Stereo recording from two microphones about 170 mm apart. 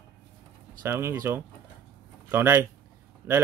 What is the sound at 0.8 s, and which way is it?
Speech, 15° right (ahead or behind).